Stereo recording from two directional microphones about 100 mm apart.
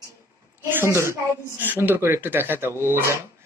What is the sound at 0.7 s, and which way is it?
A woman's voice, 25° right (ahead or behind).